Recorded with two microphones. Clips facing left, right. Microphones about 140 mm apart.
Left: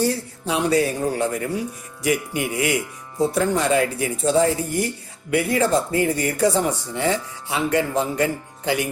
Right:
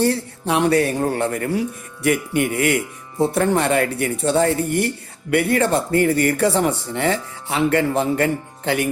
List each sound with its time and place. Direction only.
0.0 s speech: 60° right (ahead or behind)